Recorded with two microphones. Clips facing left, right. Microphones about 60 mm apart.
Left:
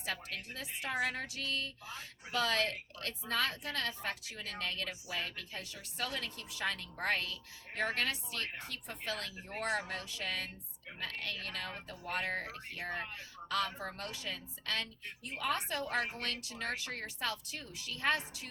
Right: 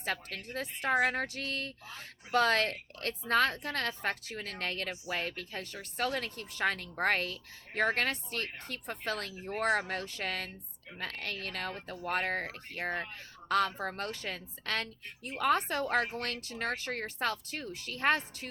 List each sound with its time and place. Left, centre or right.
0.0 s a woman's voice: right